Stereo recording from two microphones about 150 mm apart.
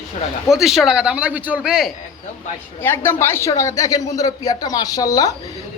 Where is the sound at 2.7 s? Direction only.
15° left (ahead or behind).